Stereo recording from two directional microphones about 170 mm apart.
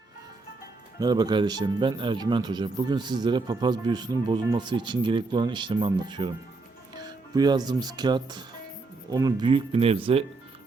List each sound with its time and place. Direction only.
0.9 s speech: 25° right (ahead or behind)
7.3 s speech: 25° right (ahead or behind)